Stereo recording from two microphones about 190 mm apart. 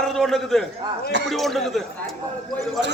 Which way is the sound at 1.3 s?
Centre (ahead or behind).